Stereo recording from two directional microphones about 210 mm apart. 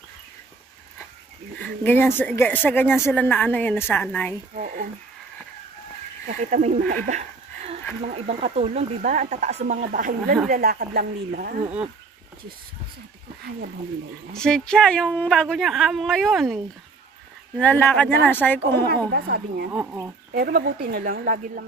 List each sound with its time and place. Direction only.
1.6 s a woman's voice: 10° left (ahead or behind)
4.6 s speech: 45° right (ahead or behind)
6.2 s speech: 40° right (ahead or behind)
7.1 s laughter: 30° right (ahead or behind)
8.1 s speech: 30° right (ahead or behind)
14.3 s a woman's voice: 5° left (ahead or behind)
17.6 s a woman's voice: 10° left (ahead or behind)
19.1 s speech: 50° right (ahead or behind)
19.7 s speech: 10° right (ahead or behind)
20.3 s speech: 45° right (ahead or behind)